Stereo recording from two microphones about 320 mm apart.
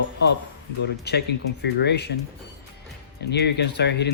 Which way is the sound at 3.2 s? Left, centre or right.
Left.